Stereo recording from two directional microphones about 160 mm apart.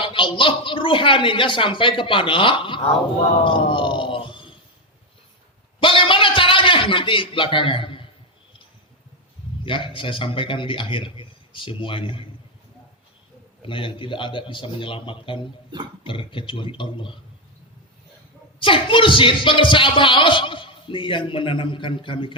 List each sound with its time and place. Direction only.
0.0 s speech: 30° left (ahead or behind)
3.4 s groan: 30° left (ahead or behind)
5.8 s a sound: 35° left (ahead or behind)
9.6 s speech: 30° left (ahead or behind)
13.7 s speech: 35° left (ahead or behind)
18.6 s speech: 30° left (ahead or behind)